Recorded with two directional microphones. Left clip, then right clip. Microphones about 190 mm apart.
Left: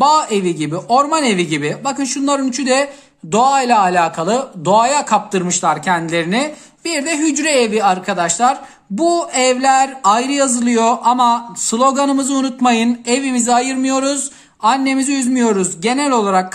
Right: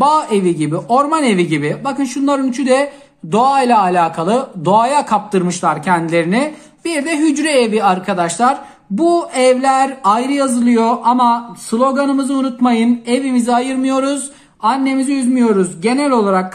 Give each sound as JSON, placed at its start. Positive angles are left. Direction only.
{"t": 0.0, "sound": "speech", "side_deg": 20}